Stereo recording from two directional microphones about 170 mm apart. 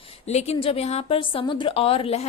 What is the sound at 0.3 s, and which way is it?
A woman's voice, 40° left (ahead or behind).